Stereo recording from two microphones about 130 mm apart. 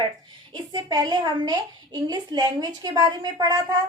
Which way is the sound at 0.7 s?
30° right (ahead or behind).